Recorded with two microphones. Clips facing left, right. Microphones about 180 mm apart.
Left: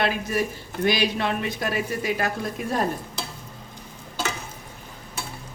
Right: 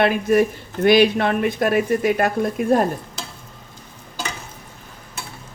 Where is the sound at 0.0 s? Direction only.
60° right (ahead or behind).